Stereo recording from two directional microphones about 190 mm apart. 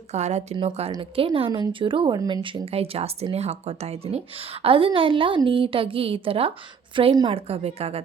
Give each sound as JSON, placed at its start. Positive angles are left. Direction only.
{"t": 0.1, "sound": "a woman's voice", "side_deg": -35}